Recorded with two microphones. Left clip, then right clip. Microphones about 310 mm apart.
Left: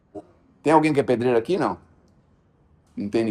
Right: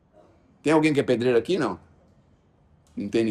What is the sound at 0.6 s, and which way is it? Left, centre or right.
Speech, centre.